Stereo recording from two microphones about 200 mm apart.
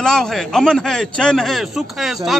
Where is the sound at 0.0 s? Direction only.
5° left (ahead or behind).